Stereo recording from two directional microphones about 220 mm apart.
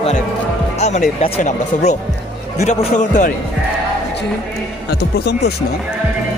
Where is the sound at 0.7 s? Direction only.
30° left (ahead or behind).